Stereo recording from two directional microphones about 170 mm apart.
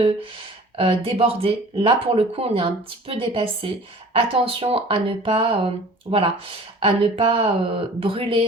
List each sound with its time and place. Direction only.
0.8 s speech: 35° right (ahead or behind)